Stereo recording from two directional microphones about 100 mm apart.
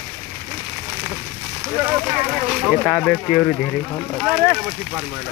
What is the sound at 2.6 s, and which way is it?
Speech, centre (ahead or behind).